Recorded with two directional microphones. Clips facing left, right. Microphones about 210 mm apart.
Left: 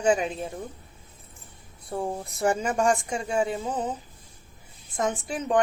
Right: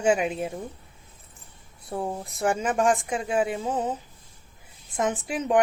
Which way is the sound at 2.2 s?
Centre (ahead or behind).